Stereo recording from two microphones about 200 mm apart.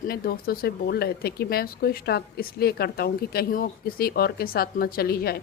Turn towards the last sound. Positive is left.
turn(degrees=50)  # may be behind; listen again after turning